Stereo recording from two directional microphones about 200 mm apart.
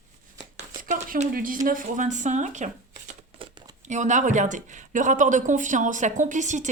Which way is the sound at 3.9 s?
35° right (ahead or behind).